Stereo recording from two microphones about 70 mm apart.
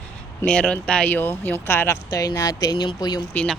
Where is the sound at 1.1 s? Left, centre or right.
Left.